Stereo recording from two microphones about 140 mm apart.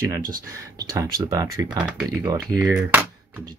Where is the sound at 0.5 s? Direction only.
25° right (ahead or behind).